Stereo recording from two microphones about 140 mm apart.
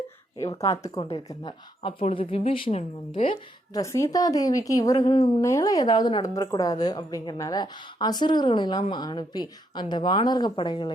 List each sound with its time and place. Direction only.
0.3 s a woman's voice: 20° left (ahead or behind); by 3.3 s 45° left (ahead or behind)
3.8 s a woman's voice: 25° left (ahead or behind)